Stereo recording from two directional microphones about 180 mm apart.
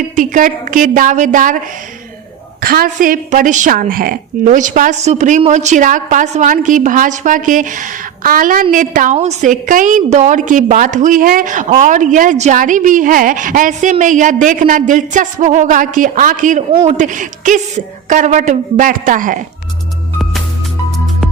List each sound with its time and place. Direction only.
0.2 s a woman's voice: 45° right (ahead or behind)
2.6 s a woman's voice: 55° right (ahead or behind)